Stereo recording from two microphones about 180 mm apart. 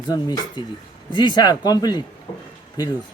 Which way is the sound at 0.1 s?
20° left (ahead or behind).